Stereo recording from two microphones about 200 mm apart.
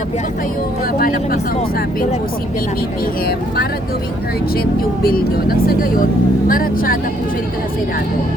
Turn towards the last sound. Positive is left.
turn(degrees=45)  # may be behind; listen again after turning